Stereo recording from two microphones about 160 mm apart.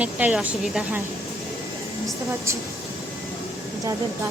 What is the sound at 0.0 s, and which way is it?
A woman's voice, 5° right (ahead or behind).